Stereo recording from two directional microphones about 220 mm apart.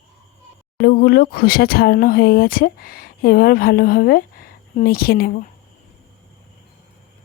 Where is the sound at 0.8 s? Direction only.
45° left (ahead or behind).